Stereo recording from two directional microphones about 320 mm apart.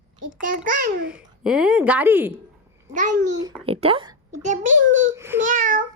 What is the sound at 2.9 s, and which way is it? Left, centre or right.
Speech, right.